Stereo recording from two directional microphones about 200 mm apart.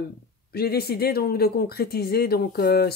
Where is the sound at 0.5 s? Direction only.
50° left (ahead or behind).